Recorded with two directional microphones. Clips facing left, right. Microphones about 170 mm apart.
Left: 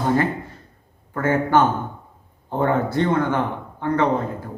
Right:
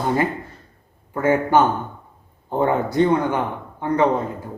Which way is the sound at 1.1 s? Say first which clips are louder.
Right 1 dB; 15° right (ahead or behind).